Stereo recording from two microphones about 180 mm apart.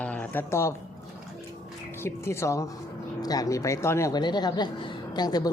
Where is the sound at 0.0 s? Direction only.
10° left (ahead or behind).